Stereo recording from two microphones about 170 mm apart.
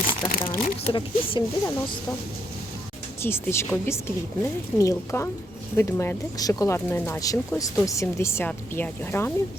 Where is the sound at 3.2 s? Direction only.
15° left (ahead or behind).